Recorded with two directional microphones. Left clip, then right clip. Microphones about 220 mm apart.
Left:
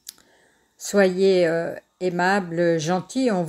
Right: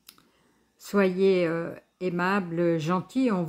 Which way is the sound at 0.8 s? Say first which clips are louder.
Left 5 dB; centre (ahead or behind).